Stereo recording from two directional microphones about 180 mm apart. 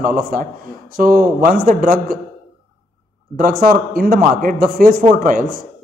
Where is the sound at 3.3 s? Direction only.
50° right (ahead or behind).